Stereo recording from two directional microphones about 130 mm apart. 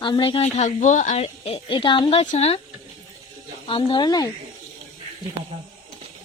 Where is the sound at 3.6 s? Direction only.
40° left (ahead or behind).